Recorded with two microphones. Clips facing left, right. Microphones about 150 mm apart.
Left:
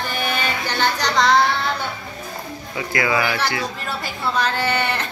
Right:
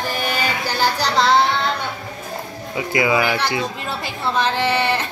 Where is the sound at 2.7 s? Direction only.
20° right (ahead or behind).